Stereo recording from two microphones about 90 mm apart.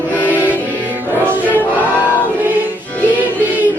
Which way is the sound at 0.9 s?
20° right (ahead or behind).